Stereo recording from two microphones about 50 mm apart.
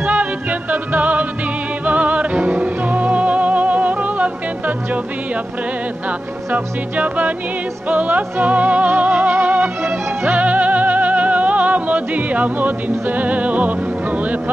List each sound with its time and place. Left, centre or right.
0.0 s music: right